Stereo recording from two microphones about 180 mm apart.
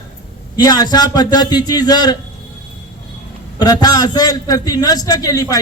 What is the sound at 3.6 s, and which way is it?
A man's voice, 20° left (ahead or behind).